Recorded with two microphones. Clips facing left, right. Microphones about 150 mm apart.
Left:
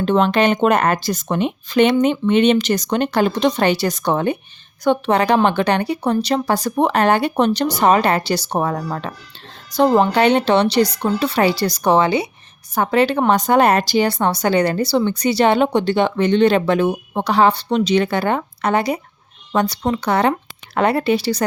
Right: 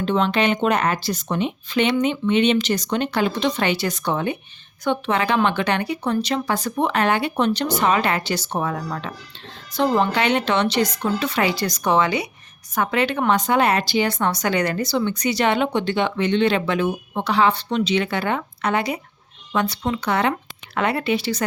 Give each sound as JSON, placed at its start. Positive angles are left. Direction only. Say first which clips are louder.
{"t": 0.0, "sound": "a woman's voice", "louder": "left 4 dB", "side_deg": 45}